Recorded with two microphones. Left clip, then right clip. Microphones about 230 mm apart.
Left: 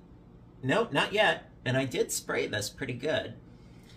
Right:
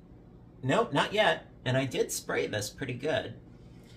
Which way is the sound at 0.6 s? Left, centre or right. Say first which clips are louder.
Even; centre.